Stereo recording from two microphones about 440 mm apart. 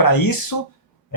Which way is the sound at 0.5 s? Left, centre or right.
Left.